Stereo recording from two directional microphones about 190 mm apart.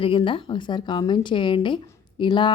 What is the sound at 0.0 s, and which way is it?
A woman's voice, 25° left (ahead or behind).